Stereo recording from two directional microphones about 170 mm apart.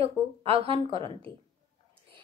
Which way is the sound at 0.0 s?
35° right (ahead or behind).